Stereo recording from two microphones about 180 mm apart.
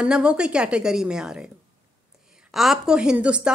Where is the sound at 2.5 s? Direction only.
Centre (ahead or behind).